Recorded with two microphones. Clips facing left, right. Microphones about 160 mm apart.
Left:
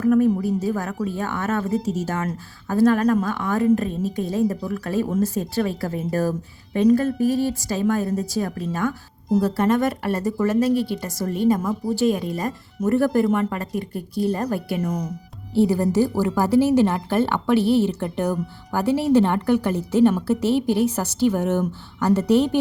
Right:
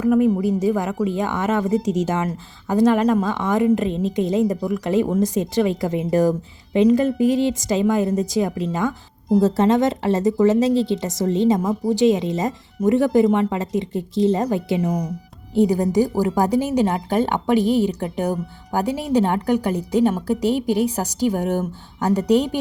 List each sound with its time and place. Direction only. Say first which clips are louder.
0.6 s a woman's voice: right 4 dB; 15° right (ahead or behind)
14.8 s a woman's voice: right 3 dB; 10° right (ahead or behind)